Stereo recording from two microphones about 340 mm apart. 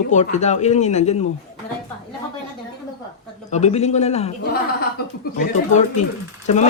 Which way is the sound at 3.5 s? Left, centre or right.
Centre.